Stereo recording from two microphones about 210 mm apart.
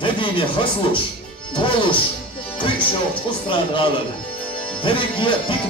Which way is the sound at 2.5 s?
25° left (ahead or behind).